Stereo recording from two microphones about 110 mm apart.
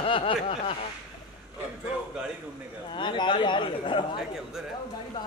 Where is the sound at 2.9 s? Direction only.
45° left (ahead or behind).